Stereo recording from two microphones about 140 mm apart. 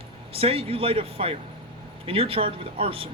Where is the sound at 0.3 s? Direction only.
40° right (ahead or behind).